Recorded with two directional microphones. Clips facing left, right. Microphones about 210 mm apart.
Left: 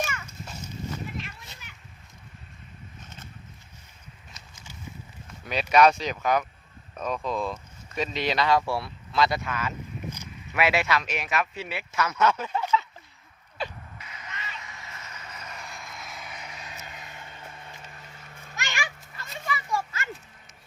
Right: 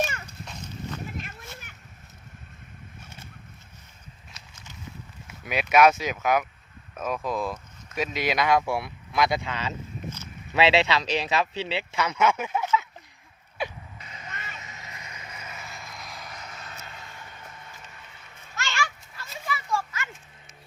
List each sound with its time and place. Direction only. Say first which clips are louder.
0.1 s a sound: left 1 dB; 35° right (ahead or behind)
0.4 s horse: left 1 dB; 10° left (ahead or behind)
3.0 s a sound: left 1 dB; 10° right (ahead or behind)
5.3 s speech: right 1 dB; 10° right (ahead or behind)
14.0 s a sound: right 1 dB; 30° right (ahead or behind)
14.3 s vehicle: even; 50° right (ahead or behind)
14.6 s vehicle: even; 20° right (ahead or behind); by 17.2 s 20° left (ahead or behind)
18.5 s children playing: right 3 dB; 15° left (ahead or behind)
19.1 s children playing: left 1 dB; centre (ahead or behind)